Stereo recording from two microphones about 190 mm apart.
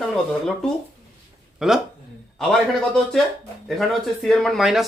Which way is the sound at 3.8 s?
Centre (ahead or behind).